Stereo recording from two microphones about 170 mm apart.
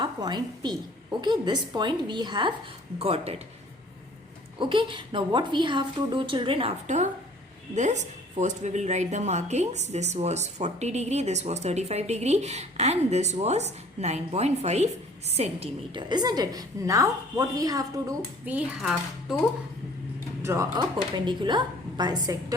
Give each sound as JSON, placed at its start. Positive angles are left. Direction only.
{"t": 0.0, "sound": "a woman's voice", "side_deg": -25}
{"t": 3.0, "sound": "a woman's voice", "side_deg": -35}
{"t": 4.5, "sound": "a woman's voice", "side_deg": -30}
{"t": 18.4, "sound": "speech", "side_deg": -5}
{"t": 20.4, "sound": "speech", "side_deg": -15}
{"t": 21.2, "sound": "a woman's voice", "side_deg": -25}